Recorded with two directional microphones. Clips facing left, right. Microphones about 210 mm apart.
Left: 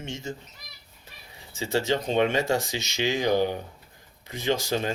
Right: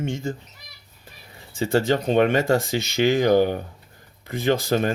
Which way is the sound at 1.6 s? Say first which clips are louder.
Right 5 dB; 55° right (ahead or behind).